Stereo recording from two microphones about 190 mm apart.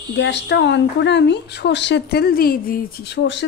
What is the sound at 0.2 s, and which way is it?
A woman's voice, 65° left (ahead or behind).